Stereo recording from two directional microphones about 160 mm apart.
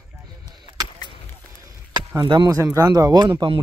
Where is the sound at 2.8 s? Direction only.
25° right (ahead or behind).